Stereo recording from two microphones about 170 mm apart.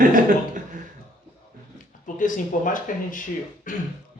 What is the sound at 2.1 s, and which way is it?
A man's voice, 50° left (ahead or behind).